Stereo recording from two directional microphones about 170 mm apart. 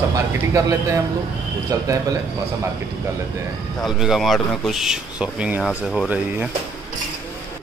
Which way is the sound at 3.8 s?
Centre (ahead or behind).